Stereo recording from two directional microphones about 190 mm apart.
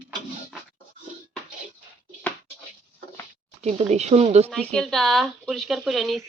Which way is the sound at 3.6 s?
35° right (ahead or behind).